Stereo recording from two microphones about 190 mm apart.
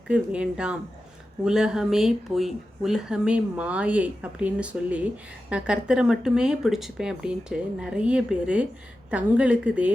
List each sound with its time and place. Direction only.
0.1 s a woman's voice: 5° right (ahead or behind)